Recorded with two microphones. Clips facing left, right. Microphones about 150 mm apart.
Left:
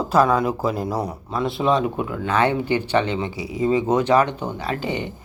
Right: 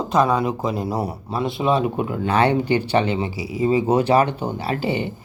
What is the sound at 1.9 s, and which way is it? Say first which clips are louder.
Speech: right 2 dB; 25° right (ahead or behind).